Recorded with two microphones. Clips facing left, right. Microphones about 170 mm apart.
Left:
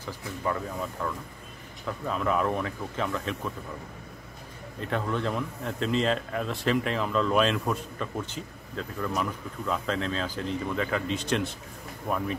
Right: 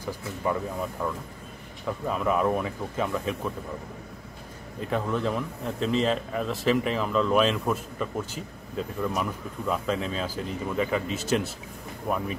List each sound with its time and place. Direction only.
0.0 s speech: 15° right (ahead or behind)
4.7 s speech: 5° right (ahead or behind)